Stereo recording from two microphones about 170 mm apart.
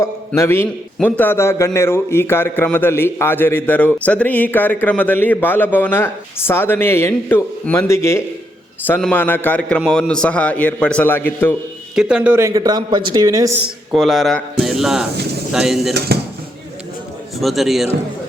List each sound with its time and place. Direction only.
0.3 s a man's voice: 15° left (ahead or behind)
11.9 s a man's voice: 5° right (ahead or behind); by 13.5 s 20° right (ahead or behind)
13.9 s speech: centre (ahead or behind)
17.4 s speech: centre (ahead or behind)